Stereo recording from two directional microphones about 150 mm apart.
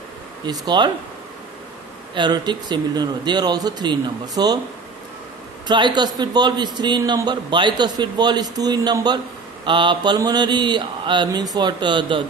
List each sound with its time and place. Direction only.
0.5 s a man's voice: 30° right (ahead or behind)
2.1 s a man's voice: 30° right (ahead or behind)
5.7 s a man's voice: 30° right (ahead or behind)
9.7 s mantra: 30° right (ahead or behind)